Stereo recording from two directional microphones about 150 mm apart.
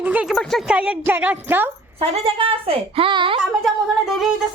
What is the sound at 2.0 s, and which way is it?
A woman's voice, 35° right (ahead or behind).